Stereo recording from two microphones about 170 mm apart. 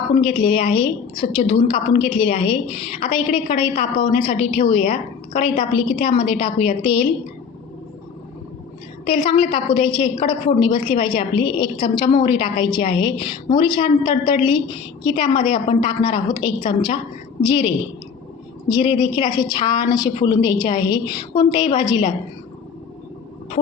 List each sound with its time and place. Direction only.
0.1 s a woman's voice: 35° left (ahead or behind)
9.0 s a woman's voice: 35° left (ahead or behind)
18.7 s a woman's voice: 25° left (ahead or behind)